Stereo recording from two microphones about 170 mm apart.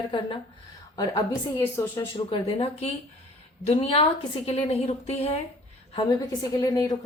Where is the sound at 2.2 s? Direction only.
30° left (ahead or behind).